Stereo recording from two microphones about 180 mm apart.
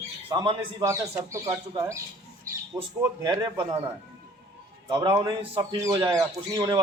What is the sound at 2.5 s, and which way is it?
A man's voice, 15° right (ahead or behind).